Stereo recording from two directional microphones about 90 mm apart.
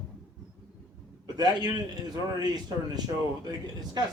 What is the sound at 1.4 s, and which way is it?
A man's voice, 50° right (ahead or behind).